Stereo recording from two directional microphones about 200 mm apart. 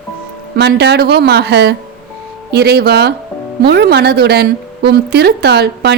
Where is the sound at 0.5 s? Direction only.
55° right (ahead or behind).